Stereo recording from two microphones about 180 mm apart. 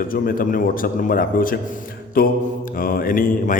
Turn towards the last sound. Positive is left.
turn(degrees=50)  # may be behind; listen again after turning